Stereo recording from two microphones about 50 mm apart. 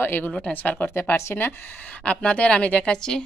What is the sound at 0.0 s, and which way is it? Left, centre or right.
Speech, left.